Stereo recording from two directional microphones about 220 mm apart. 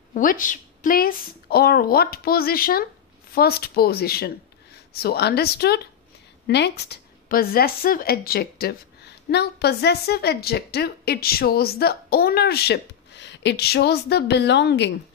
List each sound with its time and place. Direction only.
0.1 s a woman's voice: 35° left (ahead or behind)